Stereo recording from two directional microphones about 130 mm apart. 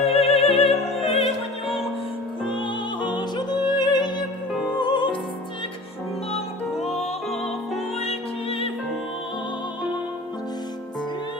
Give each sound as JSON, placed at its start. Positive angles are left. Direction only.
{"t": 0.0, "sound": "music", "side_deg": 50}
{"t": 3.0, "sound": "music", "side_deg": 35}
{"t": 6.8, "sound": "music", "side_deg": 55}